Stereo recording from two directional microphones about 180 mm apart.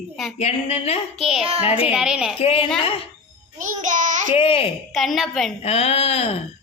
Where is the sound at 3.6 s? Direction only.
45° right (ahead or behind).